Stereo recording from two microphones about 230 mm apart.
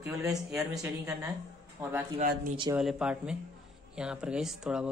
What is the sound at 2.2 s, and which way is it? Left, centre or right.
Speech, right.